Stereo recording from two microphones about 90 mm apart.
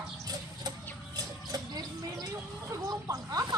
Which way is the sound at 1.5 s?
40° right (ahead or behind).